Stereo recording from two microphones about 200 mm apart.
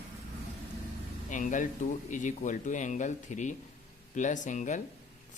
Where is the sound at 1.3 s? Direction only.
40° left (ahead or behind).